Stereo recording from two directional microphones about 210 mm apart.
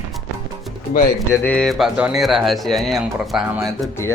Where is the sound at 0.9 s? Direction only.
40° left (ahead or behind).